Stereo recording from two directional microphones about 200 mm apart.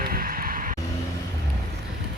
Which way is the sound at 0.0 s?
45° right (ahead or behind).